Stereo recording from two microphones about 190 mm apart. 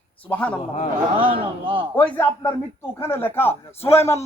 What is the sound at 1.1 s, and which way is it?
Speech, 30° right (ahead or behind).